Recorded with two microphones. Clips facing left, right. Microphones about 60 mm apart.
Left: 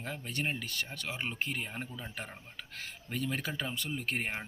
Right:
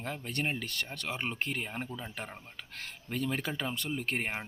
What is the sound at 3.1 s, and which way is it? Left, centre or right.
Speech, right.